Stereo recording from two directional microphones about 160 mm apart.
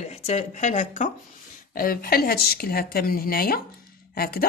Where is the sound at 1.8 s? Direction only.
65° left (ahead or behind).